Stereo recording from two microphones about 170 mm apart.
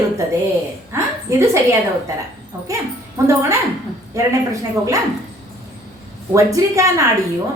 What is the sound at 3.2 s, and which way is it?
A woman's voice, 20° right (ahead or behind).